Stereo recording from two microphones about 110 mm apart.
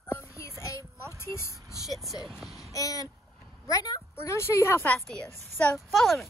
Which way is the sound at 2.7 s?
30° left (ahead or behind).